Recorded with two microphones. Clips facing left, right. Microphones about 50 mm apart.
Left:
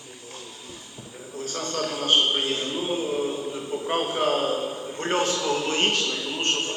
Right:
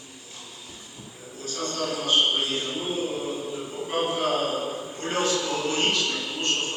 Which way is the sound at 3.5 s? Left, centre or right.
Left.